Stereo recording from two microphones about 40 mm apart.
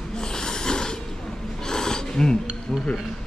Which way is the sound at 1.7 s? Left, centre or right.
Centre.